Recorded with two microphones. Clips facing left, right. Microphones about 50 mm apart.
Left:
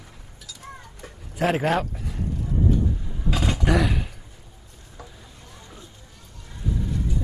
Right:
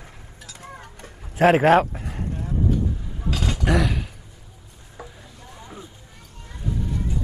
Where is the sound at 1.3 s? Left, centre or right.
Right.